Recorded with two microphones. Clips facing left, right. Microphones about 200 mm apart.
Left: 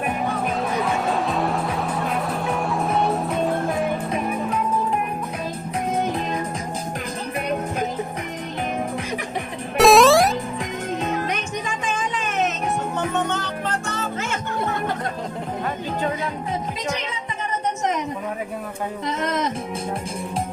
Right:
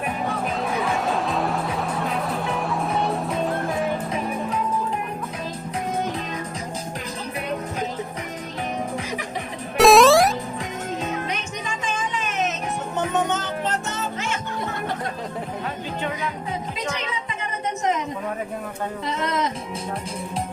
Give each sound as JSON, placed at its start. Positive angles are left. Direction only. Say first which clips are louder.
{"t": 0.6, "sound": "music", "louder": "even", "side_deg": 0}
{"t": 9.7, "sound": "music", "louder": "even", "side_deg": 0}
{"t": 13.1, "sound": "music", "louder": "right 1 dB", "side_deg": -20}
{"t": 19.2, "sound": "music", "louder": "even", "side_deg": 50}